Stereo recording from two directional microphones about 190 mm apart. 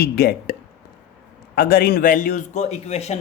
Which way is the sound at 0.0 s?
55° left (ahead or behind).